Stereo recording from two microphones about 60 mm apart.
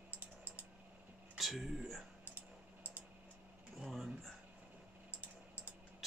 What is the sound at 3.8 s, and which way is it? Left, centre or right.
Speech, centre.